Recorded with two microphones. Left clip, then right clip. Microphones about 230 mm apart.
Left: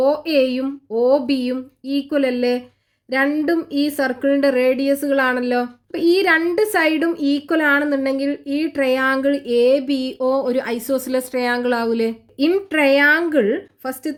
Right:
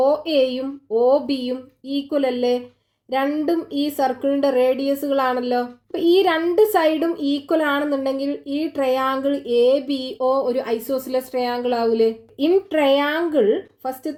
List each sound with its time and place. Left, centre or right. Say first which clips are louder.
0.3 s speech: left 1 dB; left